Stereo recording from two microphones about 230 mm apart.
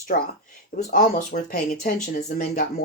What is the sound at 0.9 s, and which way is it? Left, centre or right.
Speech, left.